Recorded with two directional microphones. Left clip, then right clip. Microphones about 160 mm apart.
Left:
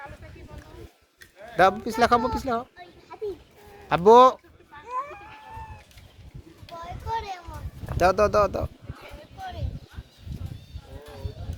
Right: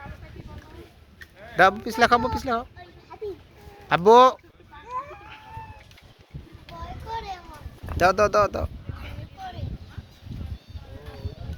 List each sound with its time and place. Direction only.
1.5 s speech: 5° left (ahead or behind)
3.8 s speech: centre (ahead or behind)
4.7 s cat: 40° right (ahead or behind)
6.7 s a sound: 10° left (ahead or behind)
7.9 s speech: centre (ahead or behind)